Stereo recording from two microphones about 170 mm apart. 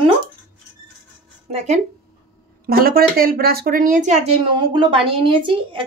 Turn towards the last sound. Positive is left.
turn(degrees=-30)  # may be behind; listen again after turning